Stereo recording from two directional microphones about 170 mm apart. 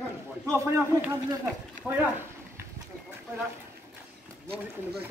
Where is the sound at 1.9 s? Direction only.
5° right (ahead or behind).